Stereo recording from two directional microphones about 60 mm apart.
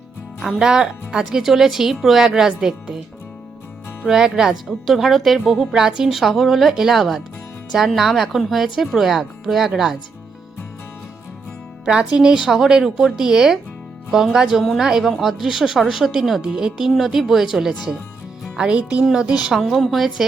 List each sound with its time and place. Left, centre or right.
0.4 s speech: centre
4.0 s a woman's voice: centre
11.9 s a woman's voice: centre
19.5 s a woman's voice: centre